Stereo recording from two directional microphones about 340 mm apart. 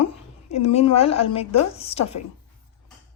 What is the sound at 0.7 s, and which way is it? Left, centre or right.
Speech, centre.